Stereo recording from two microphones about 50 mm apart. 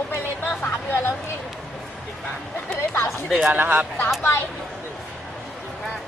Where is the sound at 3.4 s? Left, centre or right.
Right.